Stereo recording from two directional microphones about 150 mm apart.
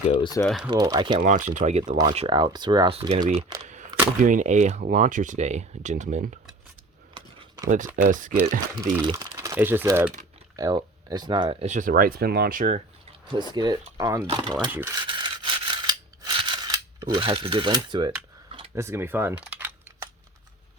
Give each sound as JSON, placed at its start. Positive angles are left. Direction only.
{"t": 0.2, "sound": "speech", "side_deg": 25}
{"t": 0.4, "sound": "speech", "side_deg": -5}
{"t": 0.7, "sound": "speech", "side_deg": -25}
{"t": 1.2, "sound": "speech", "side_deg": -60}
{"t": 3.6, "sound": "speech", "side_deg": -55}
{"t": 8.0, "sound": "speech", "side_deg": -60}
{"t": 8.7, "sound": "speech", "side_deg": -30}
{"t": 10.6, "sound": "speech", "side_deg": -25}
{"t": 11.6, "sound": "speech", "side_deg": -55}
{"t": 13.3, "sound": "speech", "side_deg": -30}
{"t": 14.7, "sound": "speech", "side_deg": -15}
{"t": 14.9, "sound": "scissors", "side_deg": -30}
{"t": 18.7, "sound": "a sound", "side_deg": -20}